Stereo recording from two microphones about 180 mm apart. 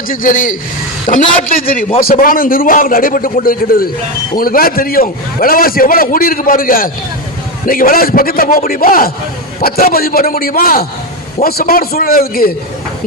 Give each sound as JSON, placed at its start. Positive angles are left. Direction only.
{"t": 0.1, "sound": "a man's voice", "side_deg": 50}